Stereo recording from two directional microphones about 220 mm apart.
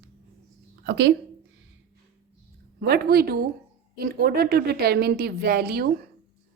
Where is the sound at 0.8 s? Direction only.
50° right (ahead or behind).